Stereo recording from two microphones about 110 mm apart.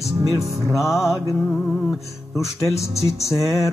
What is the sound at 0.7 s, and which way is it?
Music, centre (ahead or behind).